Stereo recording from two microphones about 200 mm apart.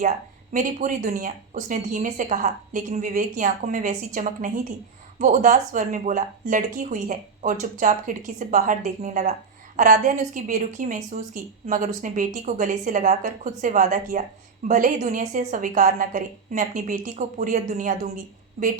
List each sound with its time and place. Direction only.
0.5 s a woman's voice: 40° right (ahead or behind)